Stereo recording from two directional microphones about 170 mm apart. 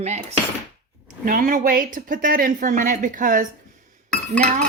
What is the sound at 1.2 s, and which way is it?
Speech, 55° right (ahead or behind).